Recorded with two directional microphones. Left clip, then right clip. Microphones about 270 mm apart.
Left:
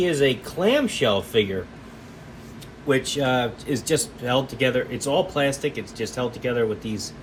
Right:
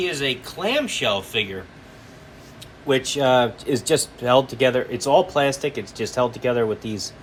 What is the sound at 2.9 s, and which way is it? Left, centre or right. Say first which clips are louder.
Speech: right 6 dB; centre.